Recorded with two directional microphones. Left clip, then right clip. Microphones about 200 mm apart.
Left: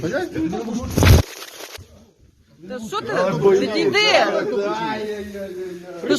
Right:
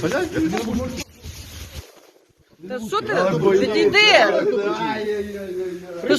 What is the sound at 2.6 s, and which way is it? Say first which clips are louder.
Speech: right 3 dB; 5° right (ahead or behind).